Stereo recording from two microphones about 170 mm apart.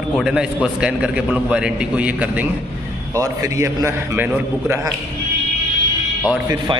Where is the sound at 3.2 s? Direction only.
20° right (ahead or behind).